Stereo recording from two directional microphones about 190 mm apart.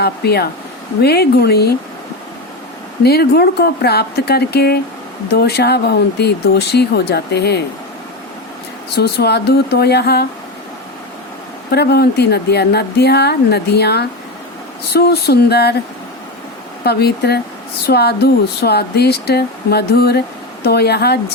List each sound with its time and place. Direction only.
0.0 s speech: 55° left (ahead or behind)
3.0 s speech: 55° left (ahead or behind)
9.0 s speech: 60° left (ahead or behind)
11.7 s speech: 60° left (ahead or behind)
16.8 s speech: 55° left (ahead or behind)